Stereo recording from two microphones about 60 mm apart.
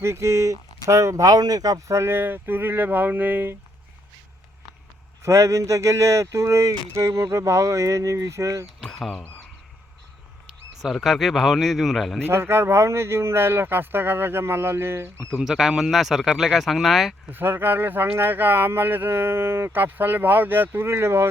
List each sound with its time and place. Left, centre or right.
0.0 s speech: right
1.9 s speech: right
2.1 s speech: right
5.2 s speech: right
8.8 s a sound: centre
10.8 s speech: centre
12.2 s speech: right
15.4 s speech: centre
17.3 s speech: right